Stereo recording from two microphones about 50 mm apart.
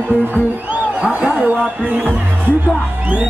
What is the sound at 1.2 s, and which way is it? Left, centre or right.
Music, right.